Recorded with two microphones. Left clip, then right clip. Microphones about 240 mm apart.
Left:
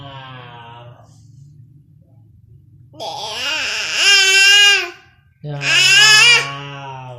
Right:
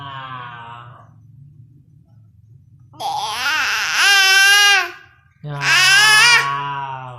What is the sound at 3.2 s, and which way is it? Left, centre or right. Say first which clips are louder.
Baby cry: right 2 dB; centre.